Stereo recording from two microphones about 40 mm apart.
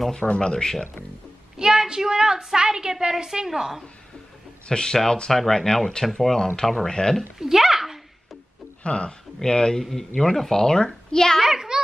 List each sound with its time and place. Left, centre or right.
0.2 s speech: left
0.5 s a child's voice: centre
1.6 s a woman's voice: centre
4.6 s a child's voice: centre
7.3 s a sound: centre
8.8 s a child's voice: left; by 11.4 s centre
11.4 s a sound: centre